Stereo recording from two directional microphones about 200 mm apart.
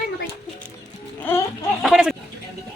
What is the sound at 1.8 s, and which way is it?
Speech, 5° right (ahead or behind).